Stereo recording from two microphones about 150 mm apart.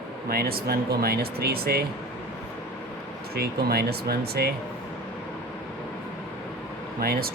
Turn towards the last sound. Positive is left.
turn(degrees=-90)